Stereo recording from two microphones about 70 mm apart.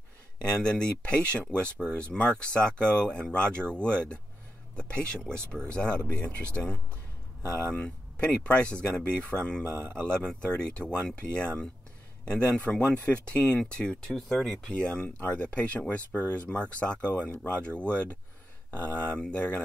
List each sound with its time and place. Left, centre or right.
0.4 s speech: centre
9.7 s speech: right
10.1 s speech: centre